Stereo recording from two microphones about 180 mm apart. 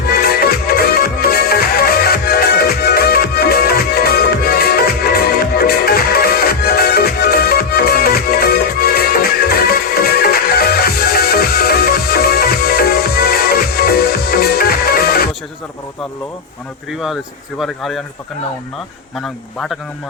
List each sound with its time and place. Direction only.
0.1 s music: 55° left (ahead or behind)
17.6 s speech: centre (ahead or behind)
19.2 s speech: centre (ahead or behind)